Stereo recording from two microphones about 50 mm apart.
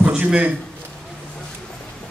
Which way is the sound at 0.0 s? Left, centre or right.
Right.